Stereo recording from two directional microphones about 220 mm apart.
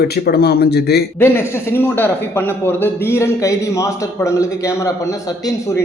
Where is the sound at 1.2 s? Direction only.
10° left (ahead or behind).